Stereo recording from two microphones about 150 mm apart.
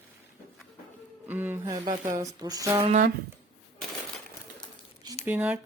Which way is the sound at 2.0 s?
25° right (ahead or behind).